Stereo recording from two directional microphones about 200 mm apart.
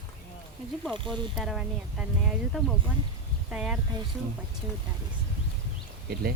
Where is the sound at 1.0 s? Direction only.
Centre (ahead or behind).